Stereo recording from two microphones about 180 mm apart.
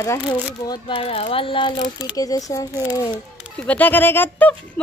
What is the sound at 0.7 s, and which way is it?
Speech, 30° left (ahead or behind).